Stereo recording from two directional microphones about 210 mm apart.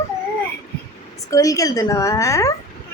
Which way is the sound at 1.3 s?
15° left (ahead or behind).